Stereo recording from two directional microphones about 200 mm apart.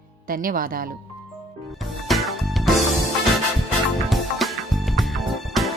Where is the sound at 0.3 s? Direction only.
45° right (ahead or behind).